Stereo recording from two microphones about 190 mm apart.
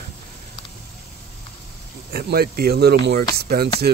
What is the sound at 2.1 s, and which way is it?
Speech, 55° right (ahead or behind).